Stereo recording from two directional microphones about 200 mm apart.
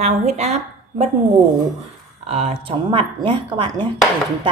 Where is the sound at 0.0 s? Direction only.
35° right (ahead or behind).